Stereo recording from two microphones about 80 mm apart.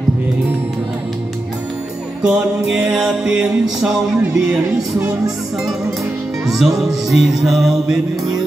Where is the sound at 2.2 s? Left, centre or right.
Centre.